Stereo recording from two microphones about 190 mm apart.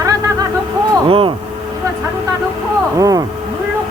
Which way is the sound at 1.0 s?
30° right (ahead or behind).